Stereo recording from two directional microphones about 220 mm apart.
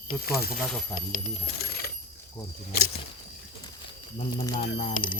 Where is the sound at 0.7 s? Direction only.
Centre (ahead or behind).